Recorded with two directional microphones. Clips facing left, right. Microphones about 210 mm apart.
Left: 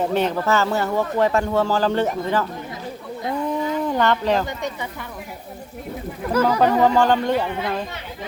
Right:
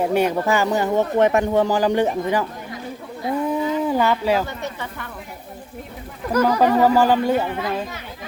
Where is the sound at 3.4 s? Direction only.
5° right (ahead or behind).